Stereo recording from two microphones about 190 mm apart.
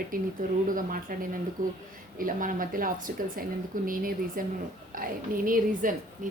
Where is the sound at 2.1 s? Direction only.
45° right (ahead or behind).